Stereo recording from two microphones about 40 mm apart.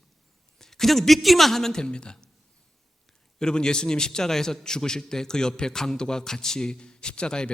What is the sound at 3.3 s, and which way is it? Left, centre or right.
A man's voice, centre.